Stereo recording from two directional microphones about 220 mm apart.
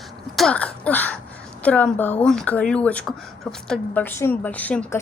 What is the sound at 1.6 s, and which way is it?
A woman's voice, 5° left (ahead or behind).